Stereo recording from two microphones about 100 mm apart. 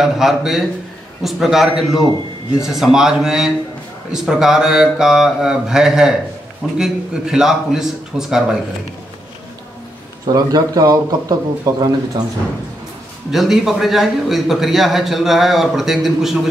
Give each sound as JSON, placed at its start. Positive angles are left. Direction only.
{"t": 0.0, "sound": "a man's voice", "side_deg": -5}
{"t": 10.2, "sound": "a man's voice", "side_deg": -40}
{"t": 13.3, "sound": "a man's voice", "side_deg": 0}